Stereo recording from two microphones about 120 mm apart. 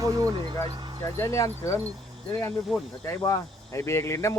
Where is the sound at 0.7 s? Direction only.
35° right (ahead or behind).